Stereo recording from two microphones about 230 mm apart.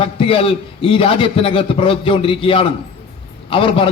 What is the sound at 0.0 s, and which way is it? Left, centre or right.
A man's voice, left.